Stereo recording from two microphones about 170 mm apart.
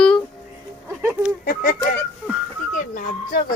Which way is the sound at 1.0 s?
10° right (ahead or behind).